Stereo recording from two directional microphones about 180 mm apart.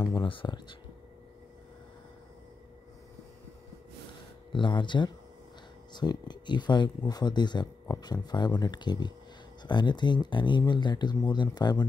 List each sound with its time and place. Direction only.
0.2 s speech: 25° left (ahead or behind)
4.5 s speech: 25° left (ahead or behind)